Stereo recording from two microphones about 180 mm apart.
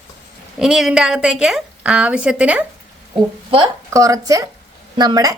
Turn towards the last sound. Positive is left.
turn(degrees=-20)  # may be behind; listen again after turning